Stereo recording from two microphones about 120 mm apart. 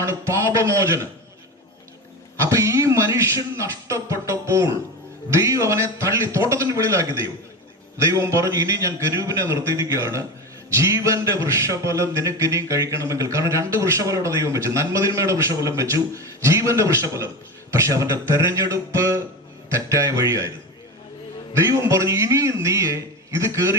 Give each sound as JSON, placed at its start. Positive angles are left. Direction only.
{"t": 0.0, "sound": "a man's voice", "side_deg": -25}
{"t": 2.4, "sound": "a man's voice", "side_deg": -25}
{"t": 21.6, "sound": "a man's voice", "side_deg": -25}